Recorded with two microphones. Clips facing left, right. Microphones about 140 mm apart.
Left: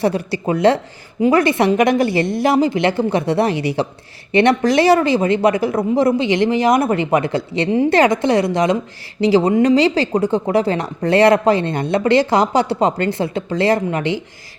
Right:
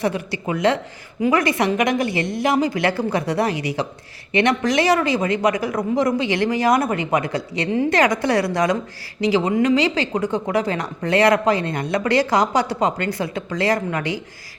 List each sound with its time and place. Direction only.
0.0 s speech: 35° left (ahead or behind)
9.2 s speech: 35° left (ahead or behind)